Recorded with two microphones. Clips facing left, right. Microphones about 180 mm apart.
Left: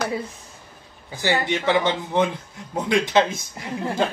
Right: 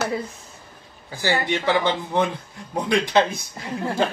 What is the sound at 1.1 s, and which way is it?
Speech, 20° left (ahead or behind).